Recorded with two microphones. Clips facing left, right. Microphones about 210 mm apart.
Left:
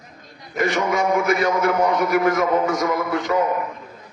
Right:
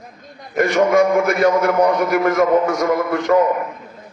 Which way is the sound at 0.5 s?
50° right (ahead or behind).